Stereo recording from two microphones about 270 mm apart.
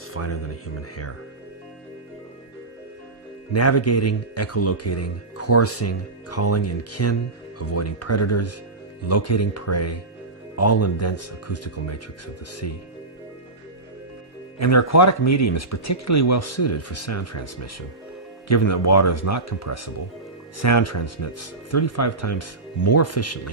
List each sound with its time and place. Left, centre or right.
0.1 s speech: left
3.5 s speech: left
14.6 s speech: left